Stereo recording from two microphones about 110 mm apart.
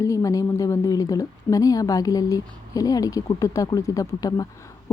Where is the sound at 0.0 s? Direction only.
30° left (ahead or behind).